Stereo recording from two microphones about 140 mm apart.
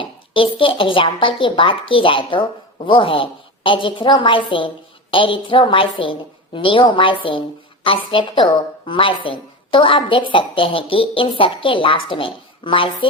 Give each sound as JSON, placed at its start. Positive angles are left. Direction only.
{"t": 0.0, "sound": "a woman's voice", "side_deg": 35}